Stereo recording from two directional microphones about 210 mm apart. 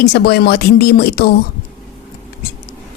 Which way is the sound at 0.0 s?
50° left (ahead or behind).